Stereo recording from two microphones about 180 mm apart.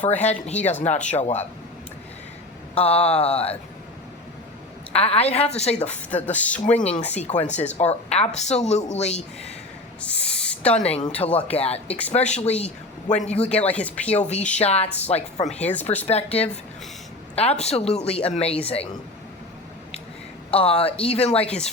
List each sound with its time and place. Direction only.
0.2 s speech: 40° left (ahead or behind)
2.7 s speech: 35° left (ahead or behind)
4.9 s speech: 35° left (ahead or behind)
6.1 s speech: 10° left (ahead or behind)
7.1 s speech: 40° left (ahead or behind)
10.0 s owl: 5° left (ahead or behind)
10.8 s speech: 40° left (ahead or behind)
13.5 s speech: 5° left (ahead or behind)
14.2 s speech: 40° left (ahead or behind)
15.5 s speech: 10° left (ahead or behind)
16.0 s speech: 35° left (ahead or behind)
20.5 s speech: 30° left (ahead or behind)